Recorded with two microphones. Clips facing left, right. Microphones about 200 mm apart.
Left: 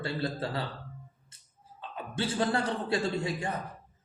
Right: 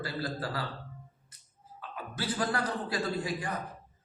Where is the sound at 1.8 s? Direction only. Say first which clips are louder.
Left 3 dB; 25° left (ahead or behind).